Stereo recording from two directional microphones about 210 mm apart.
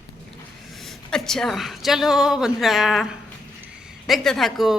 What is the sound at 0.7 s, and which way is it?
A woman's voice, centre (ahead or behind).